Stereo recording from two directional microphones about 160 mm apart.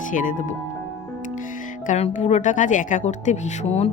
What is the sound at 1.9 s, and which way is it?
A woman's voice, 50° left (ahead or behind).